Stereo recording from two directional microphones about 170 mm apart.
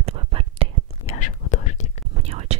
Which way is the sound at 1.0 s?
45° left (ahead or behind).